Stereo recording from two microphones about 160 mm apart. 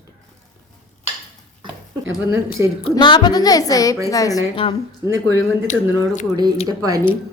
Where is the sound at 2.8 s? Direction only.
30° left (ahead or behind).